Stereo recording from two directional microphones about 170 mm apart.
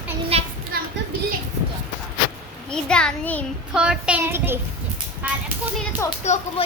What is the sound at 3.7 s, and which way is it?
Speech, 5° right (ahead or behind).